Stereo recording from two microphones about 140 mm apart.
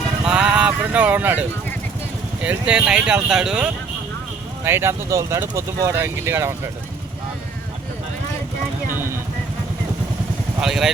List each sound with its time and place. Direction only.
0.3 s a sound: 5° right (ahead or behind)
2.4 s speech: 10° right (ahead or behind)
4.6 s speech: 15° right (ahead or behind)
8.9 s vehicle: 15° right (ahead or behind)
10.6 s speech: 5° right (ahead or behind)